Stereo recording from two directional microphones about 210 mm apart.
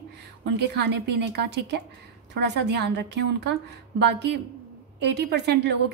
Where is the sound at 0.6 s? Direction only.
55° right (ahead or behind).